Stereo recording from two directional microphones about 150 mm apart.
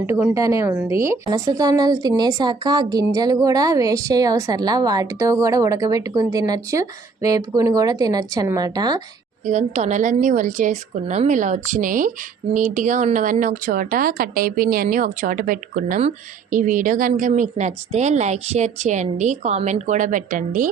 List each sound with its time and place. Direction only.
0.0 s a woman's voice: 15° right (ahead or behind)
9.5 s a woman's voice: 50° right (ahead or behind)
16.0 s speech: 50° right (ahead or behind)